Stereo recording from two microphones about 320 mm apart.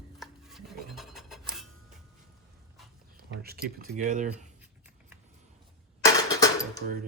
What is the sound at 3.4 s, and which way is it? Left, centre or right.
Speech, right.